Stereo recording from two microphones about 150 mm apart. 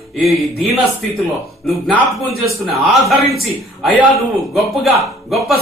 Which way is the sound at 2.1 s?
Centre (ahead or behind).